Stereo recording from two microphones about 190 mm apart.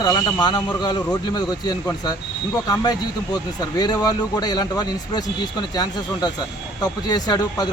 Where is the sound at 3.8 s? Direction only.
20° left (ahead or behind).